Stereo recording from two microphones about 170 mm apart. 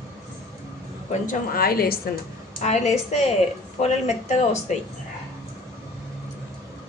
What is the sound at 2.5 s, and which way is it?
Speech, 40° left (ahead or behind).